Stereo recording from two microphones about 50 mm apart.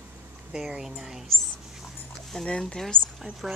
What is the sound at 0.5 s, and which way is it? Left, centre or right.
Speech, centre.